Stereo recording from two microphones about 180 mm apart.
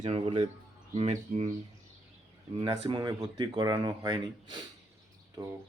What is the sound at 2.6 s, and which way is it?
Speech, 25° right (ahead or behind).